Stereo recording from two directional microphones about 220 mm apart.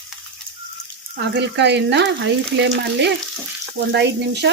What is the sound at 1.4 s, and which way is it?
Frying, 50° right (ahead or behind).